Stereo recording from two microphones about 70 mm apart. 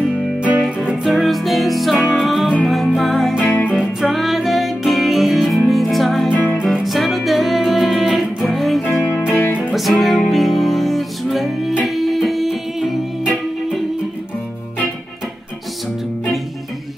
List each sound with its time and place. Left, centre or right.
0.1 s music: centre
1.0 s music: centre
6.3 s music: left
6.6 s music: centre
9.3 s music: left
9.6 s music: centre